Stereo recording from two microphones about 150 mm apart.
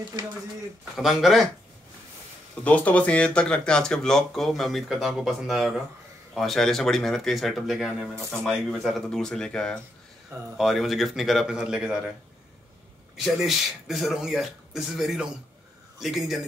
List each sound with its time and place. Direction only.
0.2 s speech: 30° right (ahead or behind)
0.9 s speech: centre (ahead or behind)
2.6 s speech: 10° left (ahead or behind)
13.1 s speech: centre (ahead or behind)